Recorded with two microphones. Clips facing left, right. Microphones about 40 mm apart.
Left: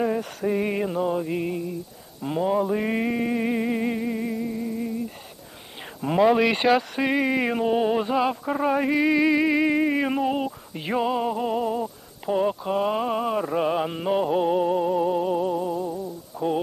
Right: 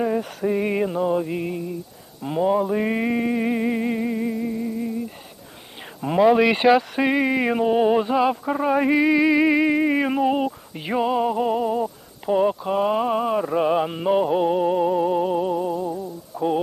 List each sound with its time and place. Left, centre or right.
0.0 s speech: centre
2.2 s music: centre
6.0 s speech: centre